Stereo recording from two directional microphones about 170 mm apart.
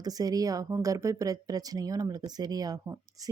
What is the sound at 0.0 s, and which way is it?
Speech, 20° right (ahead or behind).